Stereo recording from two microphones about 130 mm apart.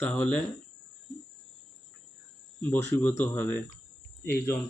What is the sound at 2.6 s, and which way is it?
Speech, 15° left (ahead or behind).